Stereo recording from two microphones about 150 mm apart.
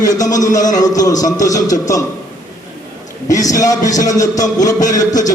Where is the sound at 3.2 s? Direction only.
25° left (ahead or behind).